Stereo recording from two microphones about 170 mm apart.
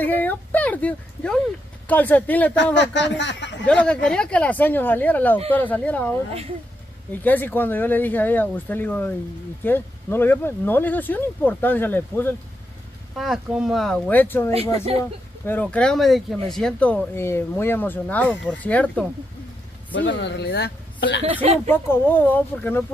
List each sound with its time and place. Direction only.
0.0 s a sound: 10° left (ahead or behind)
1.9 s speech: 10° left (ahead or behind)
2.5 s speech: 90° left
3.6 s speech: 5° left (ahead or behind)
13.1 s speech: centre (ahead or behind)
14.5 s speech: 35° right (ahead or behind)
15.4 s speech: 10° left (ahead or behind)
19.9 s speech: 90° left
21.6 s speech: 10° left (ahead or behind)